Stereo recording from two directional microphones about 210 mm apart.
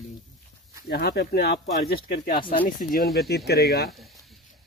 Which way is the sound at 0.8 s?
50° left (ahead or behind).